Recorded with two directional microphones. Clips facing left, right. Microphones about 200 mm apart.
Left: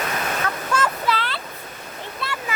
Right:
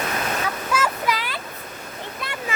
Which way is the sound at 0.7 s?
10° right (ahead or behind).